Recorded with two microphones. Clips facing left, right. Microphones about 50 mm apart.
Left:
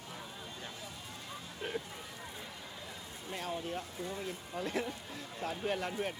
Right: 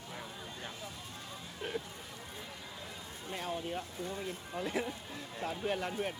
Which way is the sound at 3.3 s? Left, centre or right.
Centre.